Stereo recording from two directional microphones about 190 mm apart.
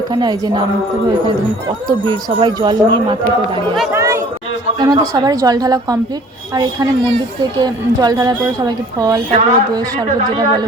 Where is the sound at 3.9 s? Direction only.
15° right (ahead or behind).